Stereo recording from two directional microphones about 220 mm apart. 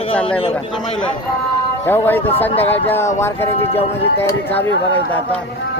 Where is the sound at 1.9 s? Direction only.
10° left (ahead or behind).